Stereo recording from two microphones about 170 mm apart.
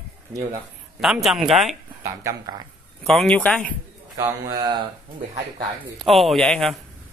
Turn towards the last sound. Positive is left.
turn(degrees=5)  # may be behind; listen again after turning